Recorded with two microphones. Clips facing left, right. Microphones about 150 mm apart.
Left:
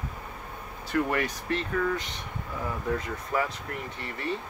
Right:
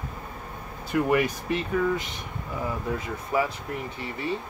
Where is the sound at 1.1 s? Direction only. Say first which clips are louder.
Right 5 dB; 10° right (ahead or behind).